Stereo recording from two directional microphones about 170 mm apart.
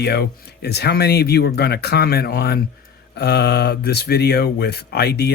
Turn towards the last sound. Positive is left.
turn(degrees=70)  # may be behind; listen again after turning